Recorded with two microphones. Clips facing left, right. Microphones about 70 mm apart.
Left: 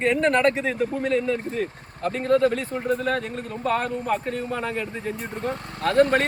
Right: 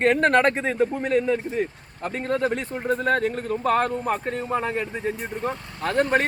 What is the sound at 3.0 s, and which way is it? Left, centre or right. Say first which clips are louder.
Speech: right 4 dB; right.